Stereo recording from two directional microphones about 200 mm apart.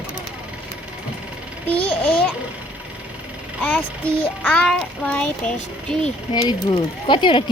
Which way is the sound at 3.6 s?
10° left (ahead or behind).